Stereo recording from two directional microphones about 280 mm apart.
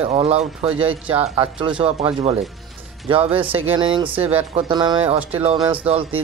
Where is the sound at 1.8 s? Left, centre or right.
Centre.